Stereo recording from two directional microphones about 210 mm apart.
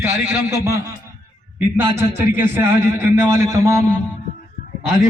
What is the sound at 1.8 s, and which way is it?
Speech, 15° right (ahead or behind).